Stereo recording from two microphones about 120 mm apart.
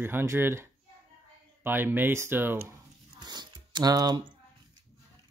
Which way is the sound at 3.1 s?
35° right (ahead or behind).